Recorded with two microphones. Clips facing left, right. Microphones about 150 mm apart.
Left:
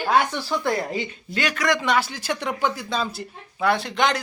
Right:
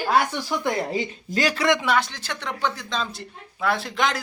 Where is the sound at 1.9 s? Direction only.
5° left (ahead or behind).